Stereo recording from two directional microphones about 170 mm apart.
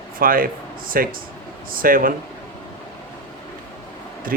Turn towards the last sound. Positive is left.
turn(degrees=-55)  # may be behind; listen again after turning